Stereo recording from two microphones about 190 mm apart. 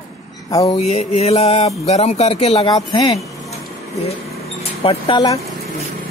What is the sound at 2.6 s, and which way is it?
Speech, 20° left (ahead or behind).